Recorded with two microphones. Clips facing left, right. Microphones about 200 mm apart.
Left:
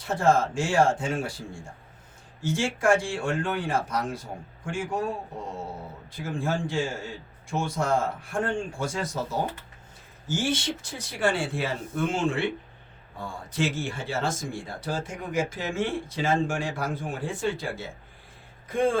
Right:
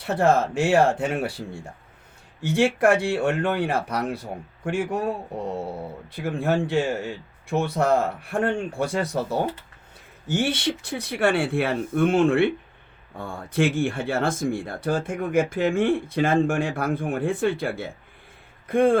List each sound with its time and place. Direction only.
0.0 s speech: 65° right (ahead or behind)